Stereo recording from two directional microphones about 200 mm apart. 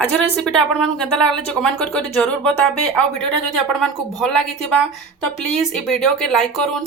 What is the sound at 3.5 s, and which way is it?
Speech, centre (ahead or behind).